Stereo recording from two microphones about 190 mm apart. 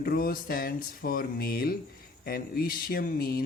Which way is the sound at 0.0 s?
50° left (ahead or behind).